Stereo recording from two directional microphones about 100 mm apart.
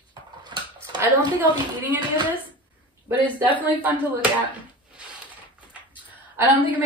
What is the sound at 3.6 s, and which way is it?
Speech, 15° right (ahead or behind).